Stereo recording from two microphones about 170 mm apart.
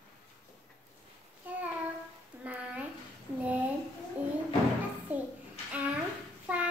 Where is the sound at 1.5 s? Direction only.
10° right (ahead or behind).